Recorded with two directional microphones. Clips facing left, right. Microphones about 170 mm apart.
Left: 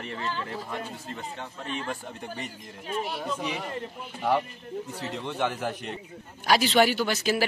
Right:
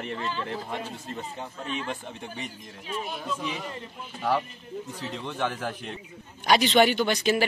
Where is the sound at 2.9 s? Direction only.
60° left (ahead or behind).